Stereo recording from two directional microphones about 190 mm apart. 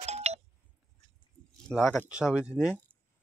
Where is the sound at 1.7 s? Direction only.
Centre (ahead or behind).